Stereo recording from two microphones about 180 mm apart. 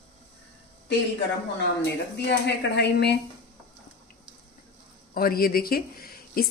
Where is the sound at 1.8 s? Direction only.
65° left (ahead or behind).